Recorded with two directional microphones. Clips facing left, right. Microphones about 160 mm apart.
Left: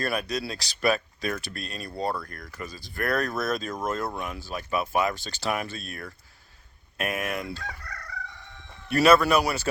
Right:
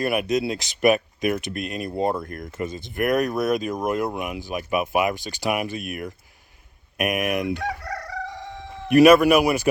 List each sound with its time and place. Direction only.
0.0 s speech: 20° right (ahead or behind)
7.6 s crowing: 90° right
8.9 s speech: 15° right (ahead or behind)